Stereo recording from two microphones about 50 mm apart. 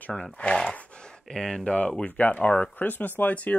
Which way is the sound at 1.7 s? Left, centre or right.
Left.